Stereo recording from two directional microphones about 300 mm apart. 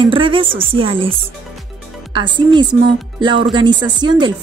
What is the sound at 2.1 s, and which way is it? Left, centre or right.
Speech, centre.